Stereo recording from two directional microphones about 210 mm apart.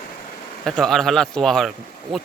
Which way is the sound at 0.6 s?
Centre (ahead or behind).